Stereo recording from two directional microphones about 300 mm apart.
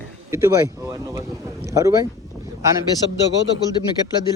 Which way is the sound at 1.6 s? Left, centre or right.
Centre.